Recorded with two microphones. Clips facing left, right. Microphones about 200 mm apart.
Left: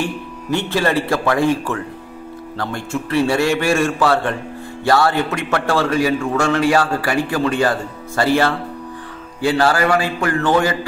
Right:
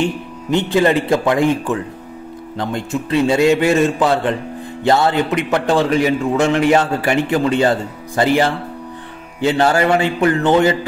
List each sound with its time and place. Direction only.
0.0 s a man's voice: 20° right (ahead or behind)